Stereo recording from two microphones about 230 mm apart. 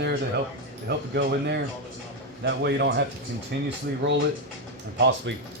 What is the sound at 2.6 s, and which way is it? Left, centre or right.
A man's voice, right.